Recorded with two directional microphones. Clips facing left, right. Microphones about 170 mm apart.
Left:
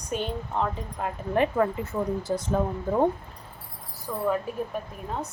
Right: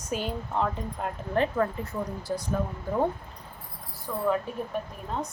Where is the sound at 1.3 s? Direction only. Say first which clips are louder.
Left 2 dB; 10° left (ahead or behind).